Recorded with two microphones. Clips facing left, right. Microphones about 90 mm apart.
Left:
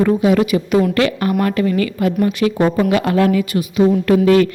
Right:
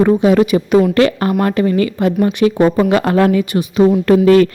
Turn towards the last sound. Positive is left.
turn(degrees=-40)  # may be behind; listen again after turning